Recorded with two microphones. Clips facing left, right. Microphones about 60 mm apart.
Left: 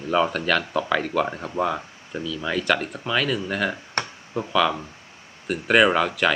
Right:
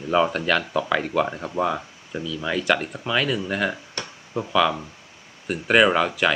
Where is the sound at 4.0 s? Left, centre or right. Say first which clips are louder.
Left 6 dB; left.